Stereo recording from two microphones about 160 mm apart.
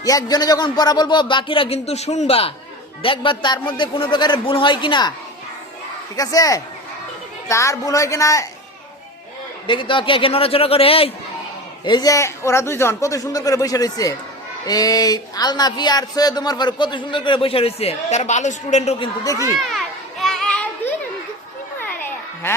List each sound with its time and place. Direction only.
0.0 s a man's voice: 20° left (ahead or behind)
6.1 s a man's voice: 20° left (ahead or behind)
9.6 s a man's voice: 30° left (ahead or behind)
11.9 s a man's voice: 25° left (ahead or behind); by 18.9 s 45° left (ahead or behind)
18.9 s a man's voice: 30° left (ahead or behind)
19.5 s children playing: centre (ahead or behind)
21.8 s a sound: 10° left (ahead or behind)